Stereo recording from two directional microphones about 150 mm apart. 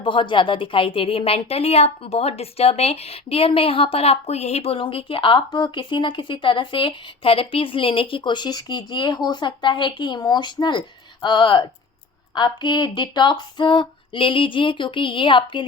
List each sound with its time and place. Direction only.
0.0 s a woman's voice: 35° left (ahead or behind)